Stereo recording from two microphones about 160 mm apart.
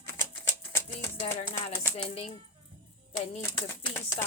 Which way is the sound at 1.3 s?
40° left (ahead or behind).